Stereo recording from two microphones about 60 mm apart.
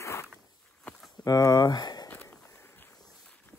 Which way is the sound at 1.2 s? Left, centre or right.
Left.